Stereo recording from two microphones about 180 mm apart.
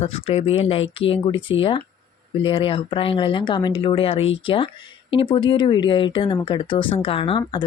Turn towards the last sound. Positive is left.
turn(degrees=25)  # may be behind; listen again after turning